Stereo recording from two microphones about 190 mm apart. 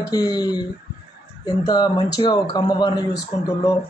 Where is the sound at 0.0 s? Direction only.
20° left (ahead or behind).